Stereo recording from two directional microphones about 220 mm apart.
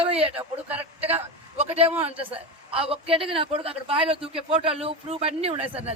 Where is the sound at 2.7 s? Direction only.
25° right (ahead or behind).